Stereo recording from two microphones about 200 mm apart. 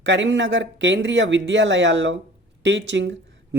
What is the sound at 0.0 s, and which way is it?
Speech, 65° right (ahead or behind).